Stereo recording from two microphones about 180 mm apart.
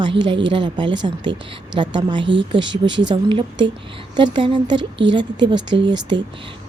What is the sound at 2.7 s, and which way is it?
Speech, 85° right.